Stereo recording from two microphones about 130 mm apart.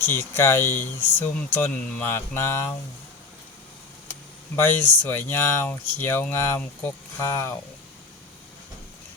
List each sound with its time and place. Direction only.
0.0 s speech: 20° left (ahead or behind)
4.1 s speech: 15° left (ahead or behind)